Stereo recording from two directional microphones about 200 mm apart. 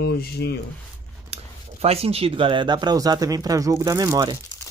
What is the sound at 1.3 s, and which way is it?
Speech, 30° right (ahead or behind).